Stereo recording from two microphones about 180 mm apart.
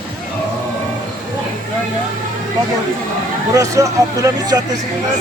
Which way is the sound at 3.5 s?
15° right (ahead or behind).